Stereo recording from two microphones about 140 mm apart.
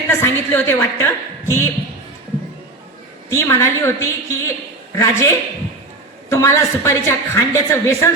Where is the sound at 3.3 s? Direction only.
20° left (ahead or behind).